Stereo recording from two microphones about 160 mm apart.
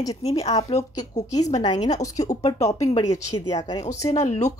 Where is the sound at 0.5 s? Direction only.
40° left (ahead or behind).